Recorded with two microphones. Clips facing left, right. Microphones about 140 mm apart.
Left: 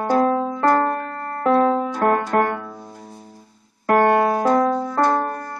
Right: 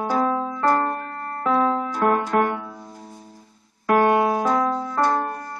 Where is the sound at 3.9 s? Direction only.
45° left (ahead or behind).